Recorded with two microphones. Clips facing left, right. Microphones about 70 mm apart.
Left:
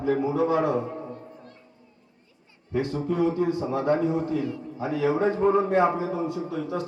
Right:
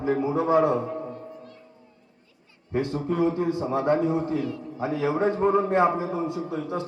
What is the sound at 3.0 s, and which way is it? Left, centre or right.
A man's voice, right.